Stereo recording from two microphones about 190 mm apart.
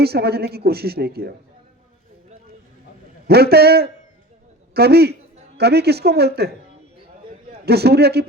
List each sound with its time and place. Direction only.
0.0 s a woman's voice: 55° right (ahead or behind)
3.2 s a woman's voice: 55° right (ahead or behind)
7.6 s a woman's voice: 55° right (ahead or behind)